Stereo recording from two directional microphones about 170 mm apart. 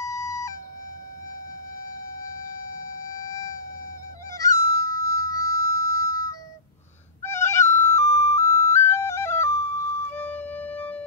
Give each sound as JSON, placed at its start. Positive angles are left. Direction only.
{"t": 0.0, "sound": "emergency vehicle", "side_deg": 20}
{"t": 4.3, "sound": "music", "side_deg": 20}